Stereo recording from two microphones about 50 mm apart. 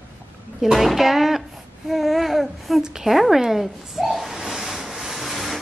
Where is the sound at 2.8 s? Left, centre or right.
Centre.